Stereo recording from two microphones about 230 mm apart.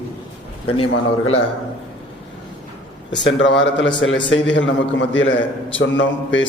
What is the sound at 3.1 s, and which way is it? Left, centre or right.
A man's voice, left.